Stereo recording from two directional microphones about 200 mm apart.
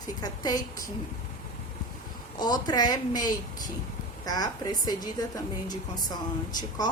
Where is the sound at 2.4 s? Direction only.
20° left (ahead or behind).